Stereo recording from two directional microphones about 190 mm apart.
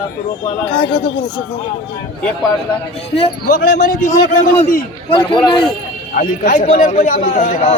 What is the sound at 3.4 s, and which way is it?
Speech, 50° left (ahead or behind).